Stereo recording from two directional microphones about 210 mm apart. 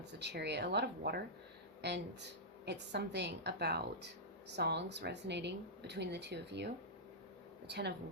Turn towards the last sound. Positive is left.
turn(degrees=-50)  # may be behind; listen again after turning